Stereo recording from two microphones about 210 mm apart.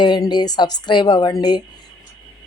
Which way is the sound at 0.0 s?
20° left (ahead or behind).